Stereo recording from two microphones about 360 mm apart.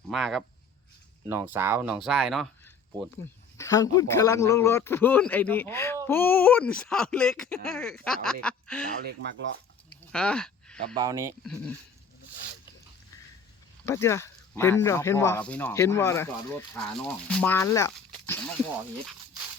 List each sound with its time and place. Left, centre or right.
0.1 s speech: centre
3.6 s speech: centre
10.1 s a sound: centre
10.9 s speech: centre
13.8 s speech: centre